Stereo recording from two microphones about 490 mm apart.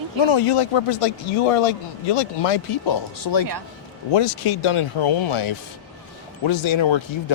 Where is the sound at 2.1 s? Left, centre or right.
Left.